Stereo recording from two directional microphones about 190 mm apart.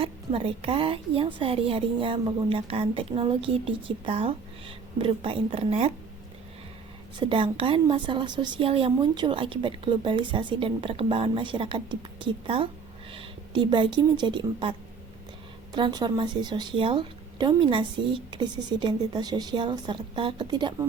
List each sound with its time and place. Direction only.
0.0 s a woman's voice: 30° right (ahead or behind)
7.2 s a woman's voice: 25° right (ahead or behind)